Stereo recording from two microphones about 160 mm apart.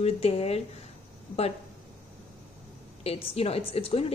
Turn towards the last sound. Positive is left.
turn(degrees=40)  # may be behind; listen again after turning